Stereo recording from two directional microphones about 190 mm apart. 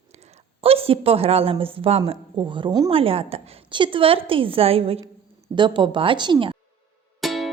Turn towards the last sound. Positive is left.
turn(degrees=0)  # may be behind; listen again after turning